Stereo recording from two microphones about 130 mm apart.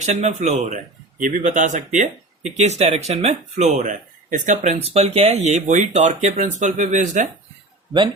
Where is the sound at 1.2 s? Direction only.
85° right; by 7.3 s 70° right (ahead or behind).